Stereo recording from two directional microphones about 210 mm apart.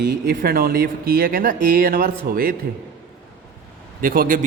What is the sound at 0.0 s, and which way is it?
A man's voice, 50° right (ahead or behind).